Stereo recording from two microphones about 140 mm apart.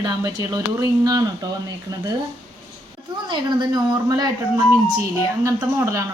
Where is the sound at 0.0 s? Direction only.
25° right (ahead or behind).